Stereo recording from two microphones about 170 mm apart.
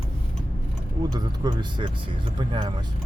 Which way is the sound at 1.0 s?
25° right (ahead or behind).